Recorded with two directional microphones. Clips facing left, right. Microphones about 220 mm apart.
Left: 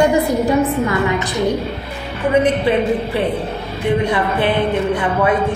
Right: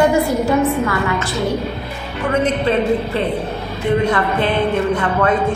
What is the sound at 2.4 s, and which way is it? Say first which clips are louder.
A woman's voice: left 1 dB; 15° left (ahead or behind).